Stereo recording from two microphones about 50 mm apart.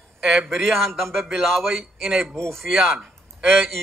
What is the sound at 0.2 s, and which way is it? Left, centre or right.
Speech, centre.